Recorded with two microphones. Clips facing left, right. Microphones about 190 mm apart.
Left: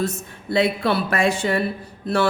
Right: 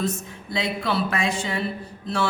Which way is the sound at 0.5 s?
60° left (ahead or behind).